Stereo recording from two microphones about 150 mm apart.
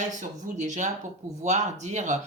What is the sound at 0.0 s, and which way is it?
Speech, 55° right (ahead or behind).